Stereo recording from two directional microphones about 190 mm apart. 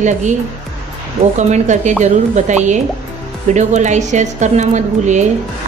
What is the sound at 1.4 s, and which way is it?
A woman's voice, 40° right (ahead or behind).